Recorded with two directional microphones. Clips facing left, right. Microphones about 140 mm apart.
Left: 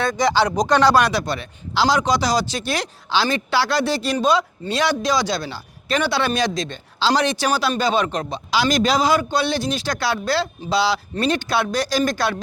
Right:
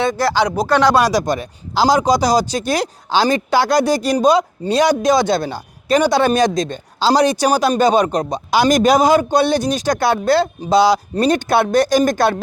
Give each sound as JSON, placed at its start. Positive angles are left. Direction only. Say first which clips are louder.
{"t": 0.2, "sound": "speech", "louder": "right 1 dB", "side_deg": -10}
{"t": 0.9, "sound": "speech", "louder": "right 3 dB", "side_deg": -40}